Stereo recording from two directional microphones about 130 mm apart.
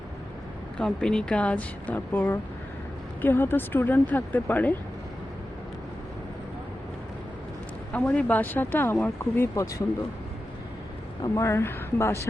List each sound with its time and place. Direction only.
0.8 s speech: 5° left (ahead or behind)
7.9 s speech: 10° left (ahead or behind)
11.2 s speech: 20° left (ahead or behind)